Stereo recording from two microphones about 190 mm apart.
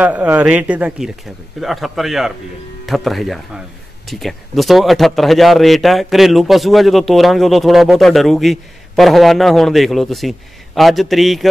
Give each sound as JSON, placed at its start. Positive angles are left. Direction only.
{"t": 0.0, "sound": "a man's voice", "side_deg": -10}